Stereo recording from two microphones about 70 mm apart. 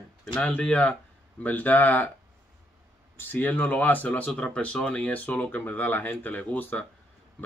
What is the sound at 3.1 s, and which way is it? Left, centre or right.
Speech, left.